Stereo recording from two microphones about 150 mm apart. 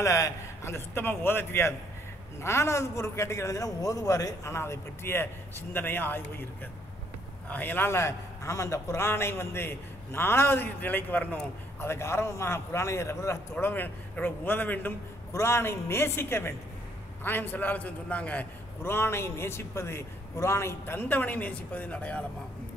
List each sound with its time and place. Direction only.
0.0 s a man's voice: 20° left (ahead or behind)
7.4 s a man's voice: 10° left (ahead or behind)